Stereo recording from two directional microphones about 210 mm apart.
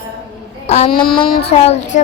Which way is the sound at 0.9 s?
45° left (ahead or behind).